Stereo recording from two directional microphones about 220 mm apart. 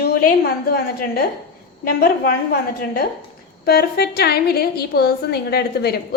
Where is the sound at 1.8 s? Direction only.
40° left (ahead or behind).